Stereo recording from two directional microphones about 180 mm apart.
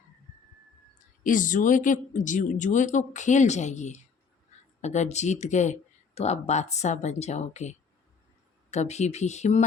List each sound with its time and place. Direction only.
1.2 s speech: 45° left (ahead or behind)